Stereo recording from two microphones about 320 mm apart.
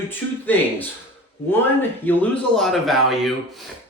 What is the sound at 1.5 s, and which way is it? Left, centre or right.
Speech, centre.